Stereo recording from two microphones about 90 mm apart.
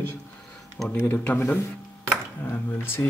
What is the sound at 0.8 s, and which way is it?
Speech, 15° left (ahead or behind).